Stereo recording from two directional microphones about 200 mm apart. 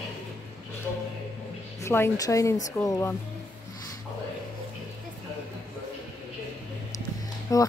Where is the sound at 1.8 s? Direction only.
10° left (ahead or behind).